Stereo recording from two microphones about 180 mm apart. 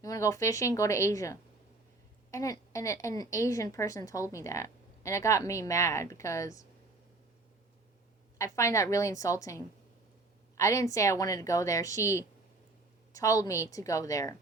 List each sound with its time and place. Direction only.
0.0 s a woman's voice: 20° left (ahead or behind)
8.4 s a woman's voice: 15° left (ahead or behind)